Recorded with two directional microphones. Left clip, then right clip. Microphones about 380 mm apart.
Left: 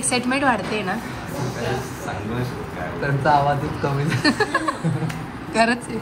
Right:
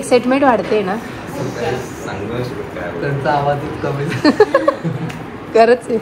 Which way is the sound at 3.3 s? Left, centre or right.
Left.